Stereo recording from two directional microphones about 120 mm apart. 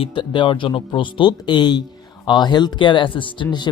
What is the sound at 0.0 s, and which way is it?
Speech, 40° left (ahead or behind).